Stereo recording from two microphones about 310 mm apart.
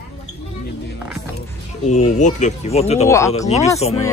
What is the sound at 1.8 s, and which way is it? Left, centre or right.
Speech, left.